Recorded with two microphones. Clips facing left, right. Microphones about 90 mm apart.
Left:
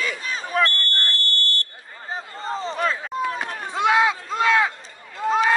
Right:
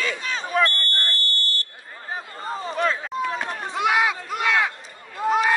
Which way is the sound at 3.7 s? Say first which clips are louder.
Left 3 dB; 30° left (ahead or behind).